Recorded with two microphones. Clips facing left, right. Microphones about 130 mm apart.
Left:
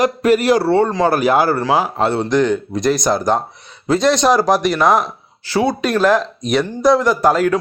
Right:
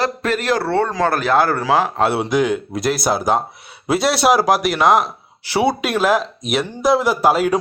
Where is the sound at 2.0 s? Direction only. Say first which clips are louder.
Left 2 dB; 10° right (ahead or behind).